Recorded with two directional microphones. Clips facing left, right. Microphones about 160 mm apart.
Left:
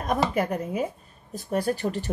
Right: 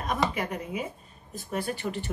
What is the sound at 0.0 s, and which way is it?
A woman's voice, 45° left (ahead or behind).